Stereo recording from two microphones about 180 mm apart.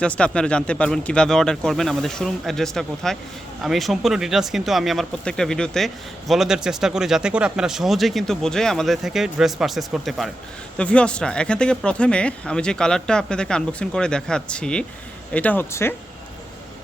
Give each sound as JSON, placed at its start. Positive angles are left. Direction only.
{"t": 0.0, "sound": "speech", "side_deg": 5}